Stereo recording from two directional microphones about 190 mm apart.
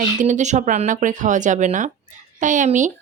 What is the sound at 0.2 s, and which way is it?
A woman's voice, 40° right (ahead or behind).